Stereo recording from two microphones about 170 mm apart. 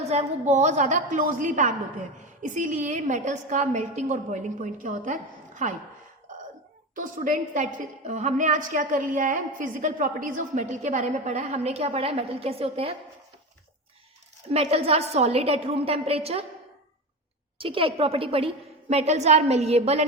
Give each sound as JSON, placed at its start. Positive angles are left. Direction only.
{"t": 0.1, "sound": "a woman's voice", "side_deg": -40}
{"t": 6.9, "sound": "a woman's voice", "side_deg": -50}
{"t": 14.5, "sound": "a woman's voice", "side_deg": -35}
{"t": 17.6, "sound": "a woman's voice", "side_deg": -30}